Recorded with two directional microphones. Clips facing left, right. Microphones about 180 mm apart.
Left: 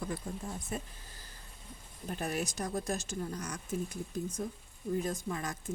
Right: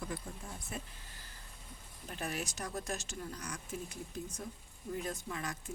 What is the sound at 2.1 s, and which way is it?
Speech, 40° left (ahead or behind).